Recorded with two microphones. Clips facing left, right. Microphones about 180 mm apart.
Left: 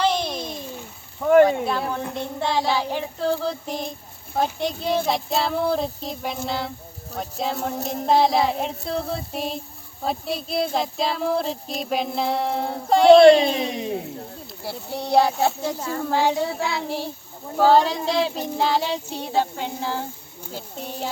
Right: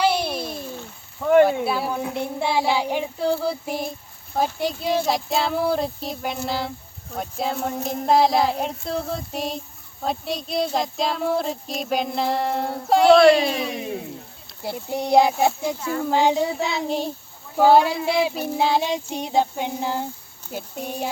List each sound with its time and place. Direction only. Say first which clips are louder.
0.0 s a sound: right 1 dB; 10° right (ahead or behind)
1.2 s a child's voice: left 1 dB; centre (ahead or behind)
4.4 s child singing: even; 5° right (ahead or behind)
13.1 s speech: left 3 dB; 25° left (ahead or behind)
14.6 s a child's voice: right 4 dB; 15° right (ahead or behind)
16.0 s child singing: right 2 dB; 15° right (ahead or behind)
17.6 s a child's voice: right 1 dB; 10° right (ahead or behind)